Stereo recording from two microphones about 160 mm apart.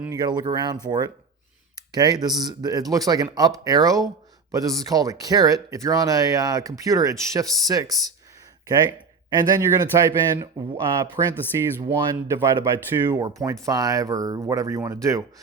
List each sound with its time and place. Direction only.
0.1 s speech: 25° right (ahead or behind)
9.3 s speech: 25° right (ahead or behind)